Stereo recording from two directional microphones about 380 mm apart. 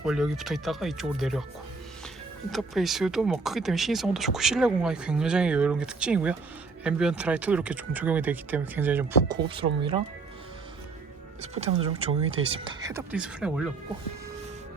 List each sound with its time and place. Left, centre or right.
0.0 s speech: centre
2.5 s speech: centre
11.5 s speech: centre